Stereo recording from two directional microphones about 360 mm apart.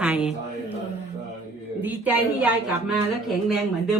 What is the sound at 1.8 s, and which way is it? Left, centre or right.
Speech, centre.